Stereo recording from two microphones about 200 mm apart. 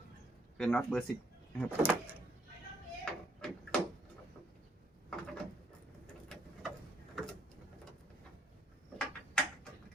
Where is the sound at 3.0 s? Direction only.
5° left (ahead or behind).